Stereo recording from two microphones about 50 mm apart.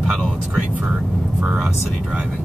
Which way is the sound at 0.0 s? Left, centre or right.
Centre.